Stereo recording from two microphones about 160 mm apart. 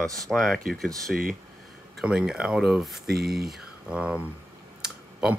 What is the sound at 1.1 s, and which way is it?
Speech, 65° right (ahead or behind).